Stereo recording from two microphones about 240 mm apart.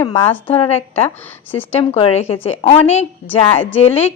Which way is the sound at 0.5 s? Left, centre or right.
Left.